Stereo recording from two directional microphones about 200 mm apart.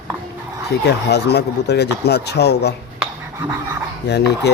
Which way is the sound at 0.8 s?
55° left (ahead or behind).